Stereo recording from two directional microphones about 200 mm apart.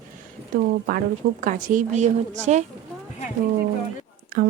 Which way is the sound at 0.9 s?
45° right (ahead or behind).